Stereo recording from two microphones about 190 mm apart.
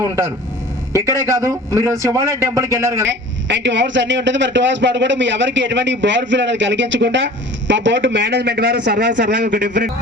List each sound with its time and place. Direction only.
0.0 s a man's voice: 15° right (ahead or behind)
3.1 s a man's voice: 70° right (ahead or behind)
9.5 s a man's voice: 55° right (ahead or behind)